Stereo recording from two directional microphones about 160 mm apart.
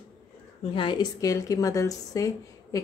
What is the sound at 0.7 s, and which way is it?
A woman's voice, 30° left (ahead or behind).